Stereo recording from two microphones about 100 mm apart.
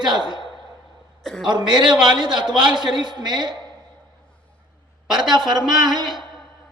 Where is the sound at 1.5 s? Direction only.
45° right (ahead or behind).